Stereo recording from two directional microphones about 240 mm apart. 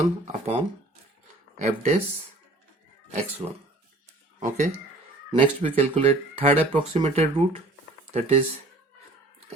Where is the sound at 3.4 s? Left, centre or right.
Right.